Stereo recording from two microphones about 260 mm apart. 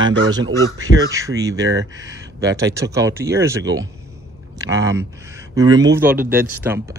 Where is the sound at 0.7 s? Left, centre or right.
Centre.